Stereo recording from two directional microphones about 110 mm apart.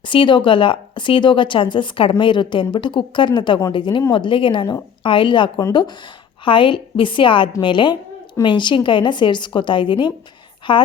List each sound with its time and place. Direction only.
0.0 s a woman's voice: 50° left (ahead or behind)